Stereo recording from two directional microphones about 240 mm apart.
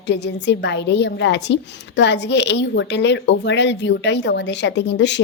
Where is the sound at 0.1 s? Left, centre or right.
Left.